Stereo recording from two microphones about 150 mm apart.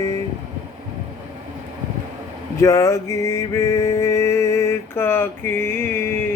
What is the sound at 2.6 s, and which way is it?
Mantra, 20° left (ahead or behind).